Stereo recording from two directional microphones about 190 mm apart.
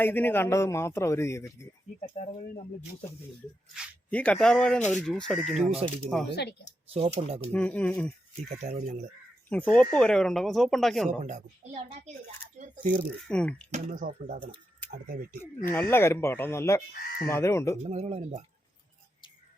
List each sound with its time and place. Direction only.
0.0 s a man's voice: 10° left (ahead or behind)
2.2 s speech: 30° left (ahead or behind)
4.1 s speech: 5° left (ahead or behind)
6.3 s speech: 60° left (ahead or behind)
6.9 s a child's voice: 35° right (ahead or behind)
7.5 s a man's voice: 5° left (ahead or behind)
8.4 s a child's voice: 35° right (ahead or behind)
9.5 s a man's voice: 10° left (ahead or behind)
11.2 s a child's voice: 40° right (ahead or behind)
13.2 s speech: 5° left (ahead or behind)
13.7 s speech: 40° right (ahead or behind)
15.4 s a man's voice: 10° left (ahead or behind)
17.8 s a child's voice: 35° right (ahead or behind)